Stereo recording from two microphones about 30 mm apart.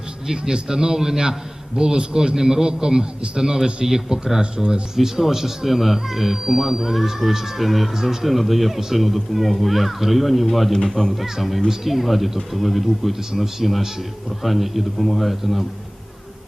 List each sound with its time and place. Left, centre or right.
0.3 s a man's voice: right; by 11.1 s centre
11.2 s speech: centre
13.1 s speech: centre